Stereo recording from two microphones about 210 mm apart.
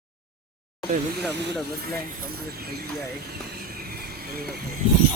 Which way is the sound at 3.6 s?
45° right (ahead or behind).